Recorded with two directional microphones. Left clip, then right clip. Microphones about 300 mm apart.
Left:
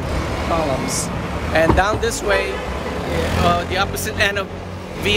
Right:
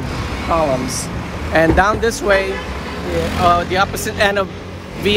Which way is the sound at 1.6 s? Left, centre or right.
Centre.